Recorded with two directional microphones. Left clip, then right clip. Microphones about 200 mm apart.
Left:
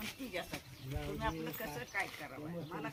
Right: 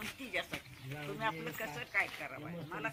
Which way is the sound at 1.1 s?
35° left (ahead or behind).